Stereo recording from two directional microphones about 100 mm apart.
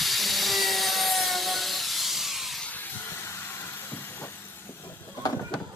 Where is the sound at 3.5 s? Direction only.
20° left (ahead or behind).